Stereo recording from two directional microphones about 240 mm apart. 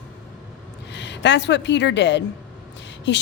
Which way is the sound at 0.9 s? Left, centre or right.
Left.